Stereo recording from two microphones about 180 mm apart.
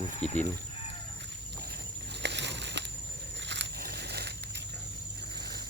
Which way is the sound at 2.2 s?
70° right (ahead or behind).